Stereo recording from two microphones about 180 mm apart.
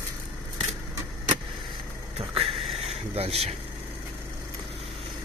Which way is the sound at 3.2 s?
35° right (ahead or behind).